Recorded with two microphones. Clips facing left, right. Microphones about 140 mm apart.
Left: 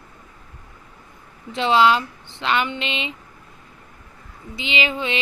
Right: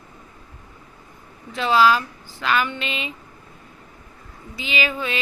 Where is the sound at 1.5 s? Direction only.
25° left (ahead or behind).